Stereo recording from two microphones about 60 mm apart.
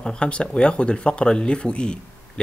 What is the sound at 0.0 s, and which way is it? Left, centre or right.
Speech, centre.